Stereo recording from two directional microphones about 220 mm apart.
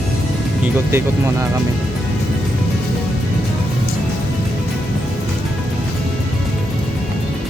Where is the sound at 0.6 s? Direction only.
10° right (ahead or behind).